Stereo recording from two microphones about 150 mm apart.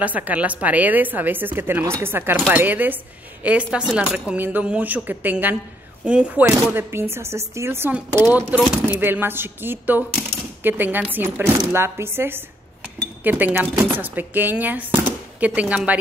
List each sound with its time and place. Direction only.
0.0 s speech: 10° right (ahead or behind)